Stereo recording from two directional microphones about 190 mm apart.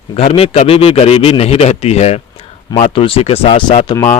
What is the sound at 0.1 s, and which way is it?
Speech, 30° left (ahead or behind).